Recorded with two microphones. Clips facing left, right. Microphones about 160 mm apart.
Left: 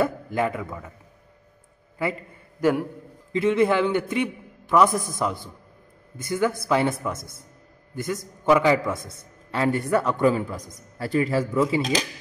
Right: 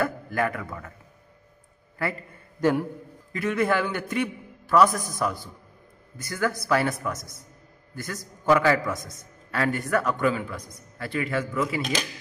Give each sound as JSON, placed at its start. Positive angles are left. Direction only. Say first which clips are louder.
{"t": 0.0, "sound": "a man's voice", "louder": "left 2 dB", "side_deg": 20}
{"t": 2.0, "sound": "a sound", "louder": "left 3 dB", "side_deg": 15}
{"t": 3.3, "sound": "a man's voice", "louder": "left 4 dB", "side_deg": 20}
{"t": 8.9, "sound": "speech", "louder": "left 1 dB", "side_deg": 25}